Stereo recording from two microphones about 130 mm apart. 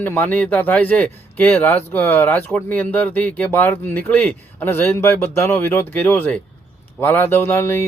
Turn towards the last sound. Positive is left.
turn(degrees=20)  # may be behind; listen again after turning